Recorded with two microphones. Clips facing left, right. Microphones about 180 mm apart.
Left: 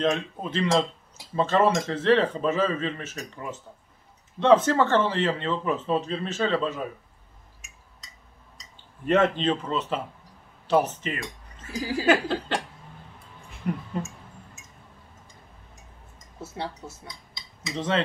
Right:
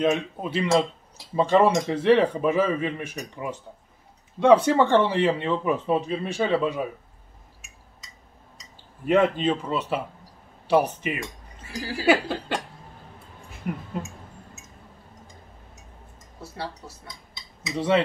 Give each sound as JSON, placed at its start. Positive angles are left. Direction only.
{"t": 0.0, "sound": "speech", "side_deg": -10}
{"t": 9.0, "sound": "speech", "side_deg": -10}
{"t": 13.5, "sound": "a sound", "side_deg": -5}
{"t": 16.3, "sound": "speech", "side_deg": 20}
{"t": 17.7, "sound": "speech", "side_deg": -10}